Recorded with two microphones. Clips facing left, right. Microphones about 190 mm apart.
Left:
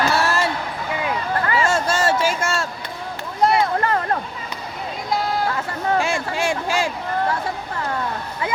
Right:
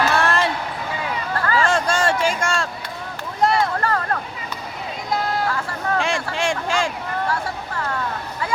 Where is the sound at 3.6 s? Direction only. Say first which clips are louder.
Left 1 dB; 20° left (ahead or behind).